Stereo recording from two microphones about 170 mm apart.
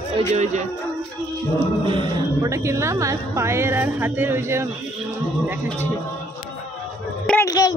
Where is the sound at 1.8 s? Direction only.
30° right (ahead or behind).